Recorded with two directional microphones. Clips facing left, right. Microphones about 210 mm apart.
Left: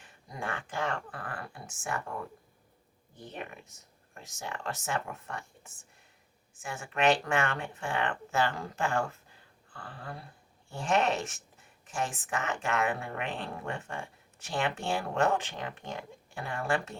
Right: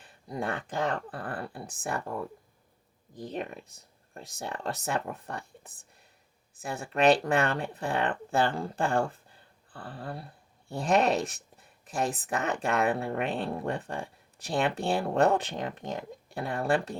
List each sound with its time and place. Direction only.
0.0 s speech: 35° right (ahead or behind)
3.2 s speech: 35° right (ahead or behind)